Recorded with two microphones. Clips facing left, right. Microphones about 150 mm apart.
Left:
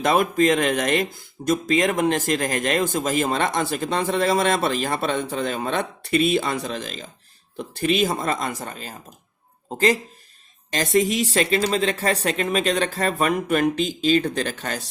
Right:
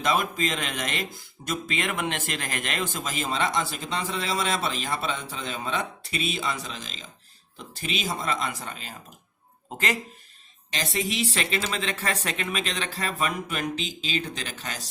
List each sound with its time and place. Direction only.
0.0 s speech: 50° left (ahead or behind); by 10.0 s 35° left (ahead or behind)
10.7 s speech: 45° left (ahead or behind)